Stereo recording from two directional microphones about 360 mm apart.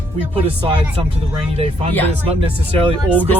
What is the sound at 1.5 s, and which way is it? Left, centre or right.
Speech, centre.